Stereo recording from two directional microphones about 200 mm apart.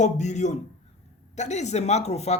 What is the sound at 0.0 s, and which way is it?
Speech, 35° left (ahead or behind).